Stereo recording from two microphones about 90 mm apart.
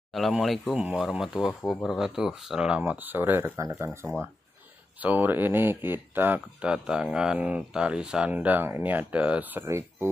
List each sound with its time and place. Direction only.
0.1 s speech: centre (ahead or behind)
2.8 s speech: 20° right (ahead or behind)
3.5 s speech: 35° right (ahead or behind)
5.0 s speech: 20° right (ahead or behind)
9.7 s speech: 30° right (ahead or behind)